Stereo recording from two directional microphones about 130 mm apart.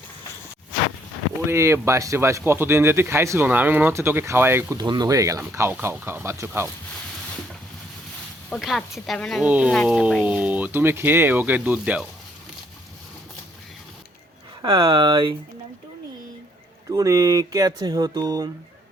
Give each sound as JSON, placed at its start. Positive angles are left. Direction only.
{"t": 1.5, "sound": "speech", "side_deg": -20}
{"t": 4.8, "sound": "speech", "side_deg": -30}
{"t": 8.4, "sound": "speech", "side_deg": 0}
{"t": 9.4, "sound": "speech", "side_deg": -10}
{"t": 14.6, "sound": "speech", "side_deg": -40}
{"t": 16.9, "sound": "speech", "side_deg": -25}